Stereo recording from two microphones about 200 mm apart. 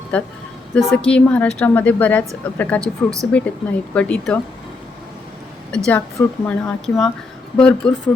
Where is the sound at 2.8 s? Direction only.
15° right (ahead or behind).